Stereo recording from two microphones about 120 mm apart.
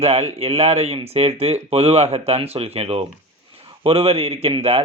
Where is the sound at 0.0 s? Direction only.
60° right (ahead or behind).